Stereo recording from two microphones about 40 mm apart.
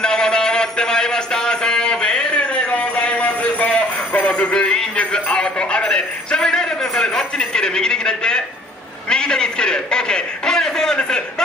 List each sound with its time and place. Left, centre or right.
0.0 s music: centre; by 4.3 s left
4.3 s music: left
4.9 s a man's voice: left